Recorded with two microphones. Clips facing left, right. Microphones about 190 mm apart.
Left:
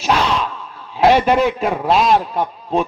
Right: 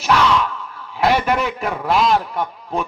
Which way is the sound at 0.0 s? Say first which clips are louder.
Right 1 dB; 20° left (ahead or behind).